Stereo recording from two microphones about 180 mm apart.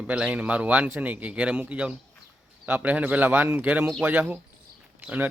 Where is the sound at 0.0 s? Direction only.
5° right (ahead or behind).